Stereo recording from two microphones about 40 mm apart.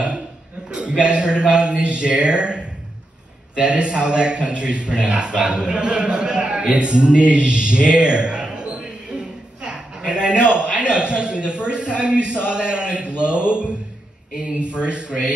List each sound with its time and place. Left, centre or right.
0.7 s a man's voice: right
6.7 s a sound: right
12.4 s a man's voice: right